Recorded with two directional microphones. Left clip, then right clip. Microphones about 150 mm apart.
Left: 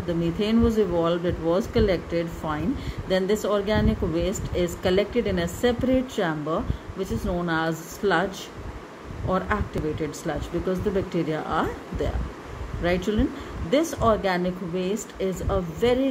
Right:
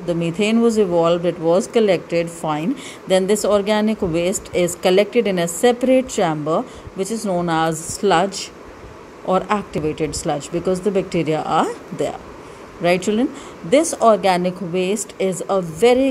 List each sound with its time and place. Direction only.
0.0 s speech: 40° right (ahead or behind)
10.2 s speech: 40° right (ahead or behind)